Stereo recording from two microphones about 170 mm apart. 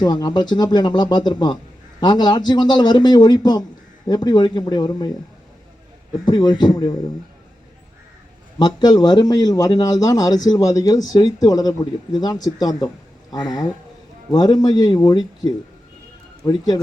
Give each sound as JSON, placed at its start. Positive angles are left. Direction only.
{"t": 0.0, "sound": "a man's voice", "side_deg": 25}
{"t": 6.2, "sound": "a man's voice", "side_deg": 25}
{"t": 8.5, "sound": "a man's voice", "side_deg": 25}